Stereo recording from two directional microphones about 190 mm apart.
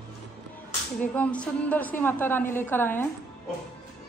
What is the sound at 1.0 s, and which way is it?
A woman's voice, 5° left (ahead or behind).